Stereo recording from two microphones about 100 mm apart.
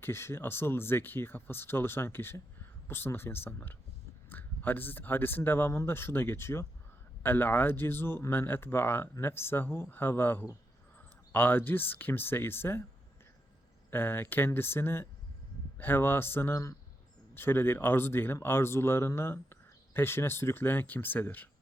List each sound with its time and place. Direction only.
0.0 s speech: 25° left (ahead or behind)
13.9 s speech: 20° left (ahead or behind)